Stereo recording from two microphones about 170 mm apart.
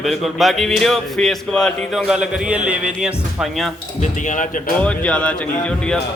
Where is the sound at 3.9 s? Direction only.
45° left (ahead or behind).